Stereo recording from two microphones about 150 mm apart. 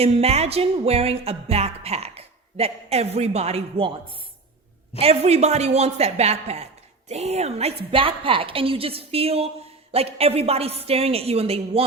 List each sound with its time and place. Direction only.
0.0 s music: 45° right (ahead or behind)
4.9 s music: 40° right (ahead or behind)
7.9 s a woman's voice: 35° right (ahead or behind)